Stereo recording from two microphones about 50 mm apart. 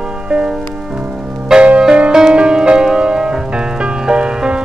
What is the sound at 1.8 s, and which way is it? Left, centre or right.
Music, right.